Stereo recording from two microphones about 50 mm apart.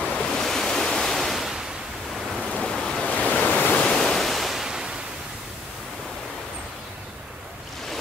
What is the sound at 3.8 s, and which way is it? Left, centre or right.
Ocean, centre.